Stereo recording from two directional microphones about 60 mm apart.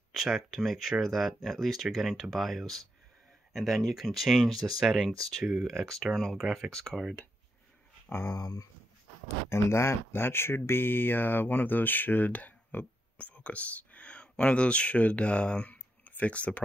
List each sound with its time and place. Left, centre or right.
0.1 s speech: centre
6.7 s speech: centre
8.1 s speech: left